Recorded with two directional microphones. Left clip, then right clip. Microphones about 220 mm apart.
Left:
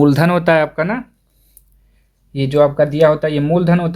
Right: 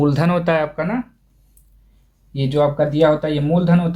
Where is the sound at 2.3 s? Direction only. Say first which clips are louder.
Left 5 dB; 55° left (ahead or behind).